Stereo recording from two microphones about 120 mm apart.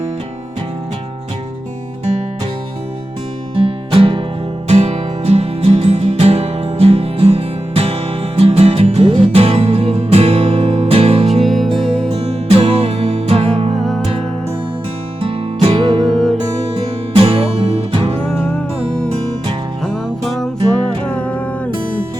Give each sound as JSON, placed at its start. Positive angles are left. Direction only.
{"t": 3.5, "sound": "music", "side_deg": -50}
{"t": 4.7, "sound": "music", "side_deg": -65}
{"t": 11.4, "sound": "music", "side_deg": 0}
{"t": 12.1, "sound": "music", "side_deg": -60}
{"t": 13.7, "sound": "music", "side_deg": 0}
{"t": 15.6, "sound": "music", "side_deg": -50}
{"t": 16.0, "sound": "music", "side_deg": 0}
{"t": 17.2, "sound": "music", "side_deg": -50}
{"t": 19.8, "sound": "music", "side_deg": 0}